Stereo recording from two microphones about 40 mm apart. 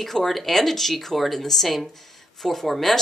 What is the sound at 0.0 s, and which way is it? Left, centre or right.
A woman's voice, centre.